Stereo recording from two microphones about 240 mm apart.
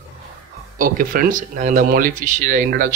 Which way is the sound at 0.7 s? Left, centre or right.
Right.